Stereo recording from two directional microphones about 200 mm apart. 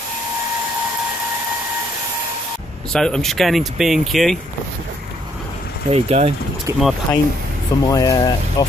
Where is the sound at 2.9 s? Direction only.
5° left (ahead or behind).